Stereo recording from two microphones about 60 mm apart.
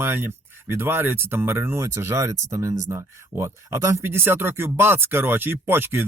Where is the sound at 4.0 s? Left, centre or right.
Right.